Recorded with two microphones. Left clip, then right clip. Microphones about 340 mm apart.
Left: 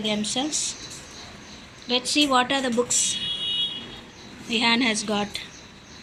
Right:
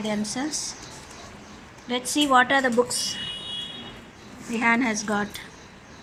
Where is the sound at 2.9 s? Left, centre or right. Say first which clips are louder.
Left 4 dB; centre.